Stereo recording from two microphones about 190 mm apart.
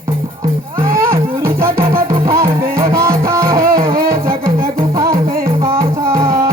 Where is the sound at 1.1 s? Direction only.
15° right (ahead or behind).